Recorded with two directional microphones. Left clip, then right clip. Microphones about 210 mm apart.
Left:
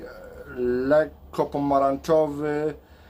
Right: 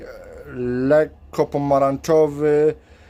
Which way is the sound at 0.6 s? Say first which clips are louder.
Right 3 dB; 60° right (ahead or behind).